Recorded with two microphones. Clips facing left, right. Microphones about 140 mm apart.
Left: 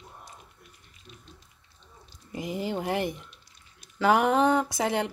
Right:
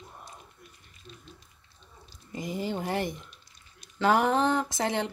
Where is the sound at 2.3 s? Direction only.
5° left (ahead or behind).